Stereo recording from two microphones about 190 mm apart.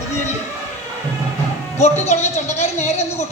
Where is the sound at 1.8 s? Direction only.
35° left (ahead or behind).